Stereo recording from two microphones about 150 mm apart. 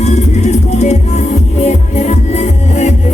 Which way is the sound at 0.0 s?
50° left (ahead or behind).